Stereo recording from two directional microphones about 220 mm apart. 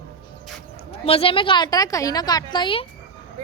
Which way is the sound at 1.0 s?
25° left (ahead or behind).